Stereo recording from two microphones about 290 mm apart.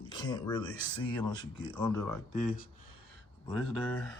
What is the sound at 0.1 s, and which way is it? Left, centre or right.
Speech, centre.